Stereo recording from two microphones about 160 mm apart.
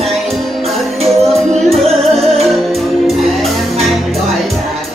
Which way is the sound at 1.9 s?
40° right (ahead or behind).